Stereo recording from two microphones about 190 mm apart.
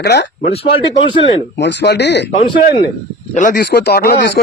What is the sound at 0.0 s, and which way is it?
Speech, 60° left (ahead or behind).